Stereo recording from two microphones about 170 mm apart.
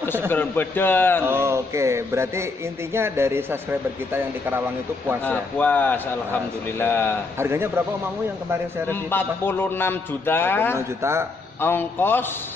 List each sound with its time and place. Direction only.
0.3 s a man's voice: 10° left (ahead or behind)
1.2 s a man's voice: 15° right (ahead or behind)
5.2 s a man's voice: 10° left (ahead or behind)
7.3 s a man's voice: 15° right (ahead or behind)
8.8 s a man's voice: 15° left (ahead or behind)
11.0 s a man's voice: 15° right (ahead or behind)
11.6 s a man's voice: 10° left (ahead or behind)